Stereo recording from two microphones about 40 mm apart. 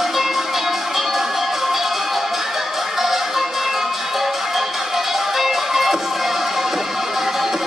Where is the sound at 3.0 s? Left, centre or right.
Centre.